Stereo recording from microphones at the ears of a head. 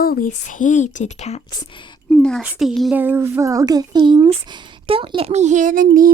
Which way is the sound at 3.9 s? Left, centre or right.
Right.